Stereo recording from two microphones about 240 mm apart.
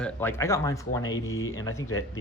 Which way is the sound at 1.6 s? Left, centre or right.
Centre.